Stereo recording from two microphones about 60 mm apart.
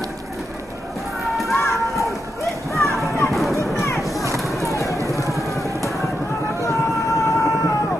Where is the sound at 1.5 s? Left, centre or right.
Left.